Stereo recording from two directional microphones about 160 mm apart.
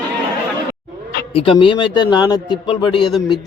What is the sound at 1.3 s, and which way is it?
A man's voice, 35° left (ahead or behind).